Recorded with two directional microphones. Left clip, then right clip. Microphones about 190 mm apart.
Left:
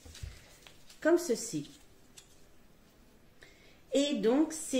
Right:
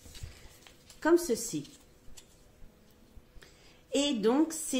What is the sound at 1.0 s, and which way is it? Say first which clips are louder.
Music: right 1 dB; 40° right (ahead or behind).